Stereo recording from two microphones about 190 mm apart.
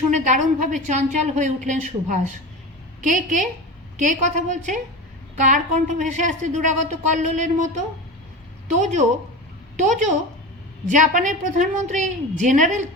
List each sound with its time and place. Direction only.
0.1 s a woman's voice: 40° right (ahead or behind)